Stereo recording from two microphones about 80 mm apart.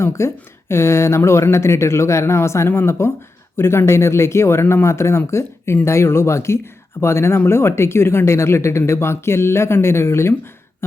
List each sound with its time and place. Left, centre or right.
0.0 s speech: left